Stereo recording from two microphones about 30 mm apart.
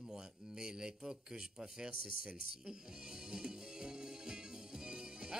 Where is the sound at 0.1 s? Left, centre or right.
Right.